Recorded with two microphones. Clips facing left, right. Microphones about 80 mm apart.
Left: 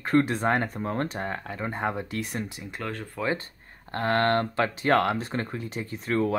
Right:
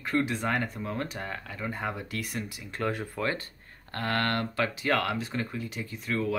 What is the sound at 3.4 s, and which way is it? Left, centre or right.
Speech, left.